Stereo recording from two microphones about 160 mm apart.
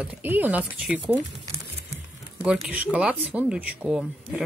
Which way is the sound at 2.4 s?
10° right (ahead or behind).